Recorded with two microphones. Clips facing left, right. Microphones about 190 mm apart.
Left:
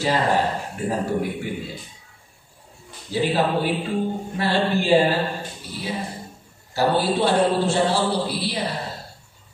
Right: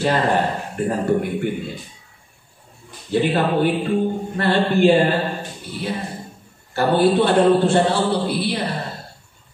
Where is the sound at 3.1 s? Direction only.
55° right (ahead or behind).